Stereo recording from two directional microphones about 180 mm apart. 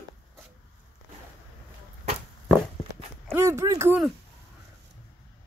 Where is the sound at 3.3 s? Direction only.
15° right (ahead or behind).